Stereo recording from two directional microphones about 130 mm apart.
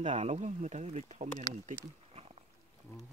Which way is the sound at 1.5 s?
55° right (ahead or behind).